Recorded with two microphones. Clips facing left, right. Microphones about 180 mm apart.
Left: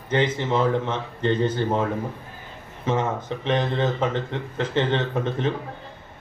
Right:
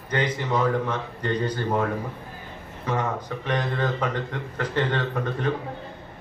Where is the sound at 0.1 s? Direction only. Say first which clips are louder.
Left 3 dB; 25° left (ahead or behind).